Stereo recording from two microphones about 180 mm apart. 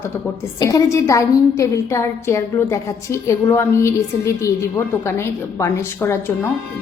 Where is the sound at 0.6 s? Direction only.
20° left (ahead or behind).